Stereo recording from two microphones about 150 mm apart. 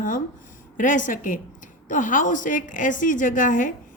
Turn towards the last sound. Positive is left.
turn(degrees=60)  # may be behind; listen again after turning